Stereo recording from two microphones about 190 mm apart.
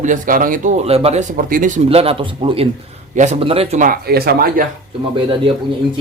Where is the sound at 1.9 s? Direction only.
30° right (ahead or behind).